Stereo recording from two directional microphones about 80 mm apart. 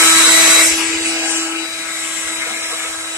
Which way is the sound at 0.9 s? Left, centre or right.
Right.